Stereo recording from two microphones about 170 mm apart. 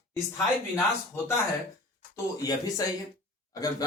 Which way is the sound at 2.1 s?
20° left (ahead or behind).